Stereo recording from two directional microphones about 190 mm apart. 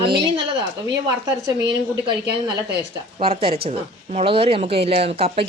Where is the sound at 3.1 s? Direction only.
30° right (ahead or behind).